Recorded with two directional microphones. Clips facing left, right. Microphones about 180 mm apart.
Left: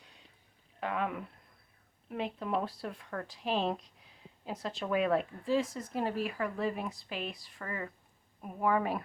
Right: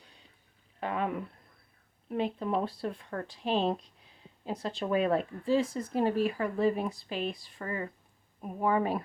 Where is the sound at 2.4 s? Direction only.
25° right (ahead or behind).